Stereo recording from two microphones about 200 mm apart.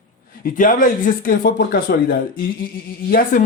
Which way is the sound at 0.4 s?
40° left (ahead or behind).